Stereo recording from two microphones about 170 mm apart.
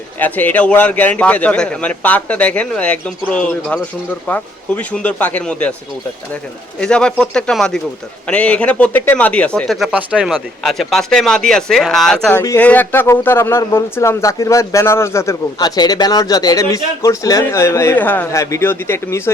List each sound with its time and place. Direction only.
0.2 s speech: 10° left (ahead or behind)
6.7 s speech: 5° left (ahead or behind)